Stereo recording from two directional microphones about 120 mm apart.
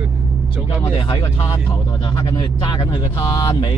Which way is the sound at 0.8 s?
45° left (ahead or behind).